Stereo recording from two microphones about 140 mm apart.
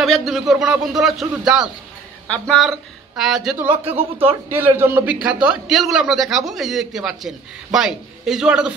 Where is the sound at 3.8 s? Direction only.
45° right (ahead or behind).